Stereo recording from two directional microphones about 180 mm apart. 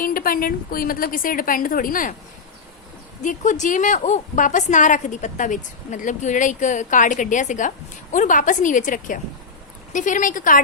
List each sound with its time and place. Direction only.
0.0 s a woman's voice: 50° left (ahead or behind)
3.2 s a woman's voice: 45° left (ahead or behind)